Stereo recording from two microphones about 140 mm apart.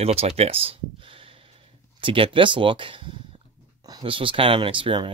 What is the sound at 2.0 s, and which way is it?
Speech, 40° right (ahead or behind).